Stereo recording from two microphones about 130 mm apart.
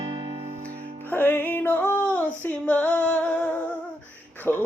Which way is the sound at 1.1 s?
15° left (ahead or behind).